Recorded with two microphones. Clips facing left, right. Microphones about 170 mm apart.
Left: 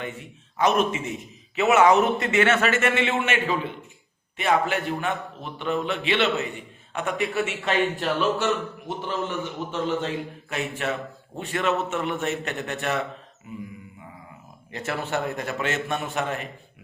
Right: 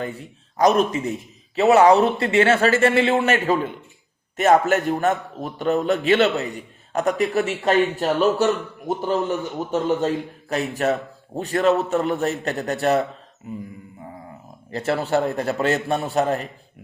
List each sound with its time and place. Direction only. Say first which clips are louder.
0.0 s a man's voice: right 5 dB; 35° right (ahead or behind)
14.7 s a man's voice: right 7 dB; 35° right (ahead or behind)